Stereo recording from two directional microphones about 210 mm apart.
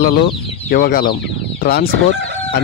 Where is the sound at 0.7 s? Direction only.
45° left (ahead or behind).